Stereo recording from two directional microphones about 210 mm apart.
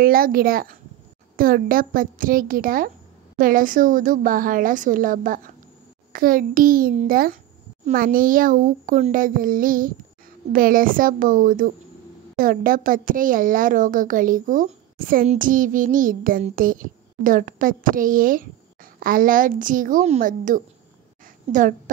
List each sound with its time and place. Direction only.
0.0 s a woman's voice: 45° right (ahead or behind)